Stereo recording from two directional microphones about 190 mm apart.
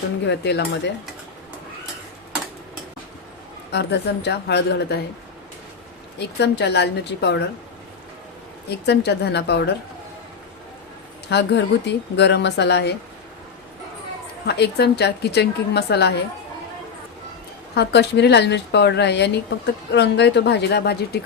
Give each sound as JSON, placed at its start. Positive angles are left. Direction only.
{"t": 0.3, "sound": "speech", "side_deg": 65}
{"t": 3.7, "sound": "a woman's voice", "side_deg": 65}
{"t": 6.1, "sound": "a woman's voice", "side_deg": 60}
{"t": 8.9, "sound": "a woman's voice", "side_deg": 60}
{"t": 11.3, "sound": "a woman's voice", "side_deg": 65}
{"t": 14.4, "sound": "a woman's voice", "side_deg": 60}
{"t": 17.7, "sound": "a woman's voice", "side_deg": 60}